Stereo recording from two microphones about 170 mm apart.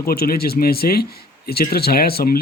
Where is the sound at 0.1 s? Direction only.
60° left (ahead or behind).